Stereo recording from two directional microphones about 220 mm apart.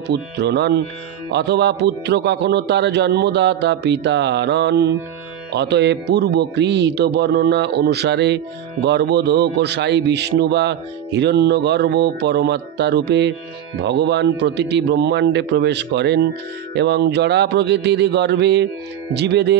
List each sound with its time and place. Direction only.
0.0 s a man's voice: 50° right (ahead or behind)